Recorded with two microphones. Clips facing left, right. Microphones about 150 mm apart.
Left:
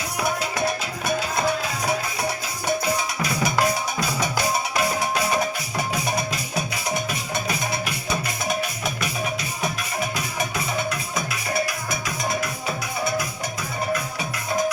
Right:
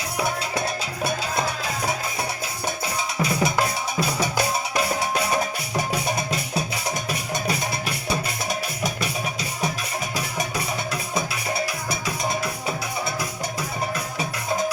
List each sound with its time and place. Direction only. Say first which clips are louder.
3.2 s music: right 2 dB; 25° right (ahead or behind)